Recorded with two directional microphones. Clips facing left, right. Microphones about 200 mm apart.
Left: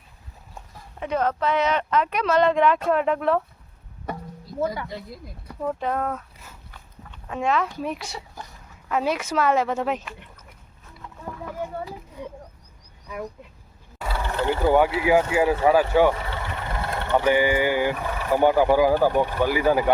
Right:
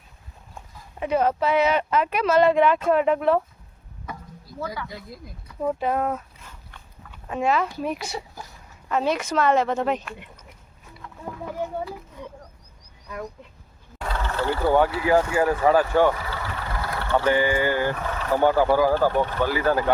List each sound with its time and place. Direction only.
0.9 s speech: 5° right (ahead or behind)
4.1 s a sound: 25° left (ahead or behind)
4.9 s speech: centre (ahead or behind)
5.5 s speech: 10° right (ahead or behind)
6.4 s dog: 5° left (ahead or behind)
7.1 s a woman's voice: 5° right (ahead or behind)
11.9 s speech: 15° left (ahead or behind)
14.0 s a sound: 10° left (ahead or behind)
15.0 s a woman's voice: 10° left (ahead or behind)
16.1 s speech: 25° left (ahead or behind)